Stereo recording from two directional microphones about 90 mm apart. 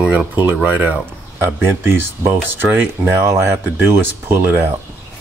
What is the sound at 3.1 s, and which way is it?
Speech, 35° right (ahead or behind).